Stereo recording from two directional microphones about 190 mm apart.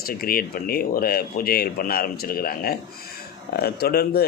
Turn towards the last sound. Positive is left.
turn(degrees=55)  # may be behind; listen again after turning